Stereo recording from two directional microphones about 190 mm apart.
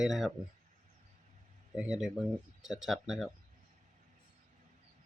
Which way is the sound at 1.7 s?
5° right (ahead or behind).